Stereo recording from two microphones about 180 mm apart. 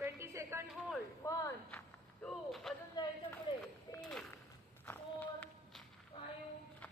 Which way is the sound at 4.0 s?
5° left (ahead or behind).